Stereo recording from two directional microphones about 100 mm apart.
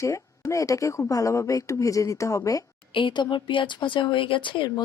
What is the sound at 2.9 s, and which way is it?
Speech, 55° left (ahead or behind).